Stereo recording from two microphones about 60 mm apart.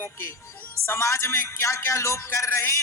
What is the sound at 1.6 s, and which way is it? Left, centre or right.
Speech, left.